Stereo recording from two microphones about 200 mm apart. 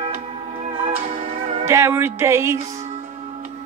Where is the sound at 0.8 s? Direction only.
30° right (ahead or behind).